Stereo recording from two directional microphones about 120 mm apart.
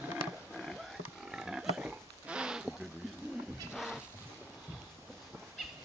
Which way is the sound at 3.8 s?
5° right (ahead or behind).